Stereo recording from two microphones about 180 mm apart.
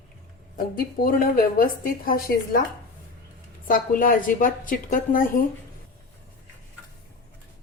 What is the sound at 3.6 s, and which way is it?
A woman's voice, 50° left (ahead or behind).